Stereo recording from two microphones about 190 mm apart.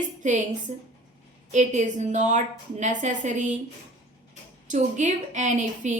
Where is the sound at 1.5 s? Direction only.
40° right (ahead or behind).